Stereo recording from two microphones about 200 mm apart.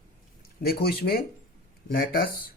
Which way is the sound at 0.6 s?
50° left (ahead or behind).